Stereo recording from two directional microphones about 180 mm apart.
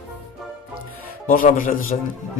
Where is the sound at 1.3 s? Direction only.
50° left (ahead or behind).